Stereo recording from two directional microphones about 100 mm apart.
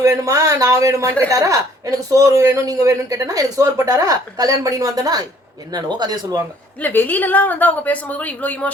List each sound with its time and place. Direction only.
0.0 s speech: 30° right (ahead or behind)
6.8 s a woman's voice: 20° left (ahead or behind)